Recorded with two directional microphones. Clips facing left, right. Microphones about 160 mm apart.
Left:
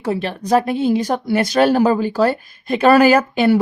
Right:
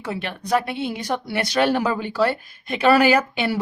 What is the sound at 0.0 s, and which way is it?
Speech, 35° left (ahead or behind).